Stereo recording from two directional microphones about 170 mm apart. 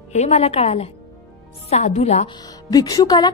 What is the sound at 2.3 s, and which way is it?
A woman's voice, 25° left (ahead or behind).